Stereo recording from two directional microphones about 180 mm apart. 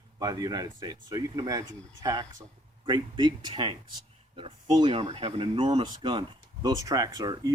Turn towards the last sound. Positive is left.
turn(degrees=-20)  # may be behind; listen again after turning